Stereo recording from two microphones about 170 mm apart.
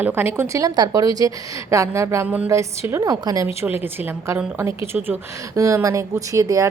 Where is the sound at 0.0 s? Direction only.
10° right (ahead or behind).